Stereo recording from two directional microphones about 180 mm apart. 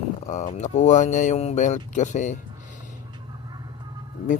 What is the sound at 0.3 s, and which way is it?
Speech, 40° left (ahead or behind).